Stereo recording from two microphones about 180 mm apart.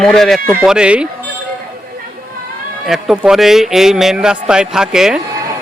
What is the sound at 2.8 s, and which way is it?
Speech, centre (ahead or behind).